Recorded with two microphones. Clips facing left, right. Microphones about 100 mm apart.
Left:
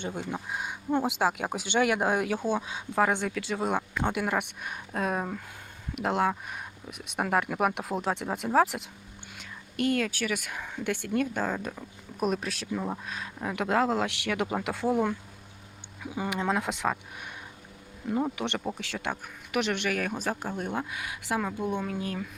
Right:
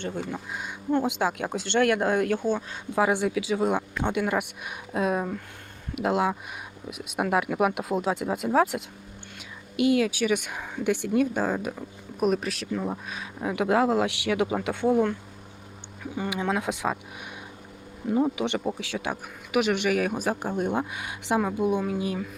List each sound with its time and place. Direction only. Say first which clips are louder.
0.0 s speech: right 2 dB; 15° left (ahead or behind)
1.0 s speech: right 1 dB; centre (ahead or behind); by 11.7 s 15° right (ahead or behind)
12.2 s speech: right 4 dB; centre (ahead or behind)
16.3 s speech: right 1 dB; centre (ahead or behind)
18.1 s speech: right 5 dB; 5° right (ahead or behind)